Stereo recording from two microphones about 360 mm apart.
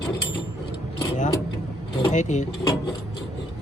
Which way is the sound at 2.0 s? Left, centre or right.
Centre.